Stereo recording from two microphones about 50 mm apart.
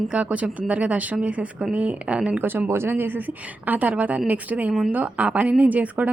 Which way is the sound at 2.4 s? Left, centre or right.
Right.